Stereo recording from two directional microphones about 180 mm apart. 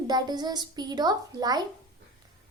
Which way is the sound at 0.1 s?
25° right (ahead or behind).